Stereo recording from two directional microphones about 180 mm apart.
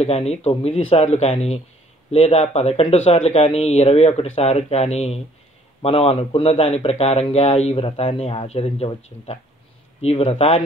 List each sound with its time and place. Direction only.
0.0 s a man's voice: 35° left (ahead or behind)